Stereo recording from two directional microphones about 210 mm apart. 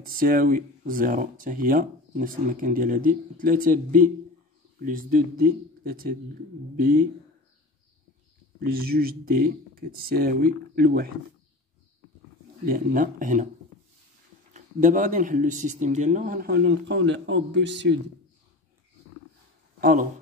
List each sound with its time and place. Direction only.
0.0 s speech: 40° right (ahead or behind)
8.5 s speech: 45° right (ahead or behind)
12.6 s speech: 40° right (ahead or behind)
14.5 s speech: 35° right (ahead or behind); by 17.9 s 55° right (ahead or behind)
19.8 s speech: 40° right (ahead or behind)